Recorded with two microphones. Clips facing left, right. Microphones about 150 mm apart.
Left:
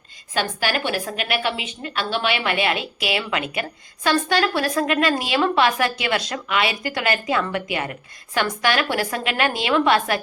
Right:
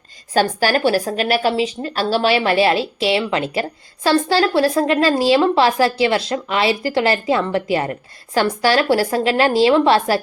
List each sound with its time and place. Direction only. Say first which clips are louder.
0.3 s a woman's voice: right 7 dB; 40° right (ahead or behind)